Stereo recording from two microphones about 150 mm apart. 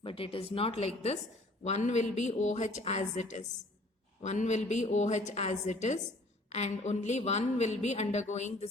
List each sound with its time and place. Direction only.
0.0 s a woman's voice: 35° left (ahead or behind)